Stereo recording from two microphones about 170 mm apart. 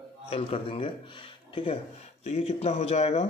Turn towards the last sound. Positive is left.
turn(degrees=40)  # may be behind; listen again after turning